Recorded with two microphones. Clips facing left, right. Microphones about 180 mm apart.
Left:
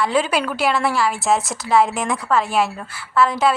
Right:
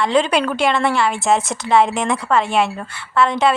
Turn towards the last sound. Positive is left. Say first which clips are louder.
# right 1 dB
turn(degrees=0)  # may be behind; listen again after turning